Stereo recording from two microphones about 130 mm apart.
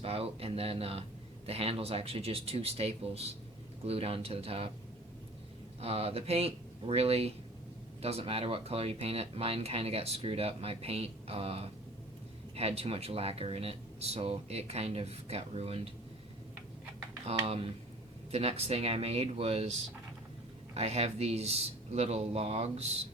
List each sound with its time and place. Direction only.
0.0 s speech: 50° right (ahead or behind)
5.8 s speech: 50° right (ahead or behind)
17.2 s speech: 50° right (ahead or behind)
20.7 s speech: 55° right (ahead or behind)